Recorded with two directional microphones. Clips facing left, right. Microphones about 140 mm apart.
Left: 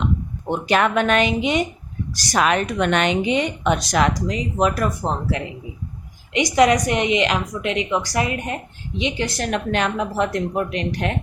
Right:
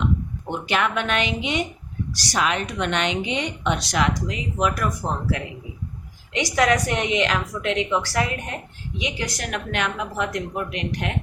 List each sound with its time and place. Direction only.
0.7 s a woman's voice: 40° left (ahead or behind)